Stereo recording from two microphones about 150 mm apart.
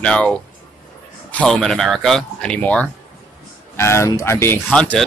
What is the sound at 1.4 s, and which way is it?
Speech, 5° left (ahead or behind).